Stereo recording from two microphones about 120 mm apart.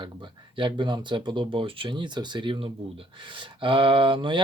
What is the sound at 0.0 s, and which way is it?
Speech, 45° right (ahead or behind).